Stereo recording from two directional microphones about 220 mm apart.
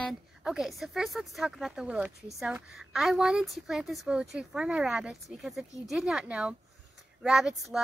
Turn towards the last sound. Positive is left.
turn(degrees=0)  # may be behind; listen again after turning